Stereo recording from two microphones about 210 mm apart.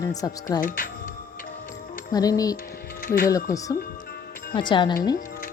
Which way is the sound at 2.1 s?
15° left (ahead or behind).